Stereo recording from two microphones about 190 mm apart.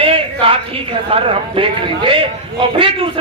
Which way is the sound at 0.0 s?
30° right (ahead or behind).